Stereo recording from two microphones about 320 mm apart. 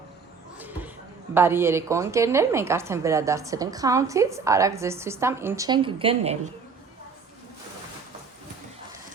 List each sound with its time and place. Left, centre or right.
1.3 s a woman's voice: centre